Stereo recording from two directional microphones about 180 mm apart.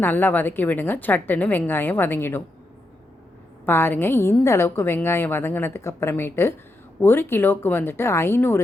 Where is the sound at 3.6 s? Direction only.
10° left (ahead or behind).